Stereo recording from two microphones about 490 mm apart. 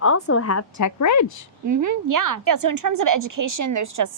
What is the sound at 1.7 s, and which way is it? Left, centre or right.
A woman's voice, right.